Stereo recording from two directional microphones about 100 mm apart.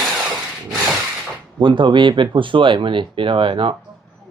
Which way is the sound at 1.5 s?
55° right (ahead or behind).